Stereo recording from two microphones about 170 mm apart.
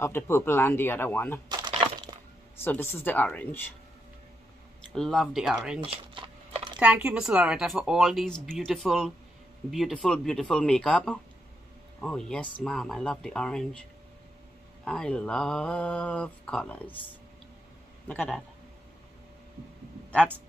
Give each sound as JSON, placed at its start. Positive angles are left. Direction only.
{"t": 0.0, "sound": "speech", "side_deg": 15}
{"t": 2.6, "sound": "speech", "side_deg": 10}
{"t": 4.9, "sound": "speech", "side_deg": 5}
{"t": 5.9, "sound": "crumpling", "side_deg": -30}
{"t": 6.8, "sound": "speech", "side_deg": -5}
{"t": 14.9, "sound": "speech", "side_deg": 5}
{"t": 20.1, "sound": "speech", "side_deg": 10}